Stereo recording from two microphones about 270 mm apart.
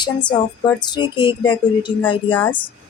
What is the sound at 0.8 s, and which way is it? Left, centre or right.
Speech, centre.